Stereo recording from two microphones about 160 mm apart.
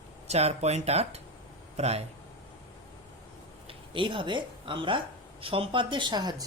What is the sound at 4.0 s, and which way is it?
Speech, 30° right (ahead or behind).